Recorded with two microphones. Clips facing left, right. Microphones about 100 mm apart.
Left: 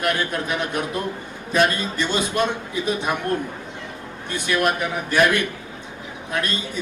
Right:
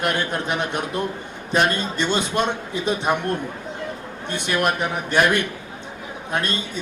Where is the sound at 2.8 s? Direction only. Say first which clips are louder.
Right 3 dB; 25° right (ahead or behind).